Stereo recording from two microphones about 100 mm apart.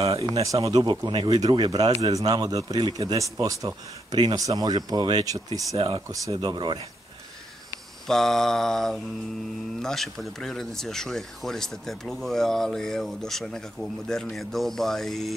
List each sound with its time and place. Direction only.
0.2 s speech: 35° right (ahead or behind)
5.8 s speech: 60° right (ahead or behind)
6.0 s speech: 35° right (ahead or behind)
8.1 s speech: 5° left (ahead or behind)